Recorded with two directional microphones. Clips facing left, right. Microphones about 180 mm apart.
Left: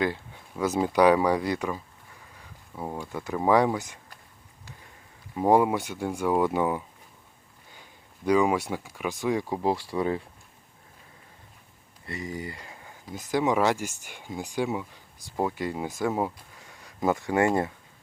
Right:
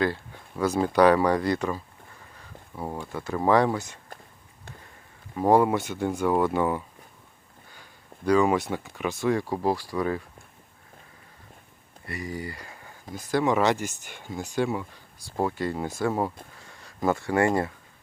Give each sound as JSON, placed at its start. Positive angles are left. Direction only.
{"t": 0.6, "sound": "speech", "side_deg": 15}
{"t": 2.7, "sound": "speech", "side_deg": 0}
{"t": 3.0, "sound": "speech", "side_deg": 15}
{"t": 5.4, "sound": "speech", "side_deg": 15}
{"t": 9.6, "sound": "speech", "side_deg": 25}
{"t": 12.0, "sound": "speech", "side_deg": 20}
{"t": 13.4, "sound": "speech", "side_deg": 10}
{"t": 16.6, "sound": "a sound", "side_deg": 15}